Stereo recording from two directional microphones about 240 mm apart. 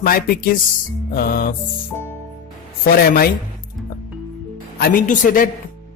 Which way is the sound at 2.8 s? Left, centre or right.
Left.